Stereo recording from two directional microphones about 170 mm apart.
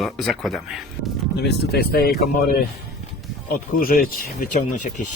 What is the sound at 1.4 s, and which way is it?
Speech, 70° left (ahead or behind).